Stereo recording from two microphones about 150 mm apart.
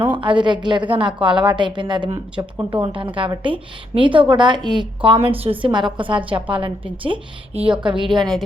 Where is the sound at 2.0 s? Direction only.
40° right (ahead or behind).